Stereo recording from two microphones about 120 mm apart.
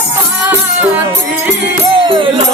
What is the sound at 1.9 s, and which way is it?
Music, 45° right (ahead or behind).